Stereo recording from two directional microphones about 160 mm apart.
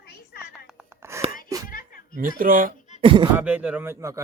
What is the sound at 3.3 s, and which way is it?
Speech, 10° right (ahead or behind).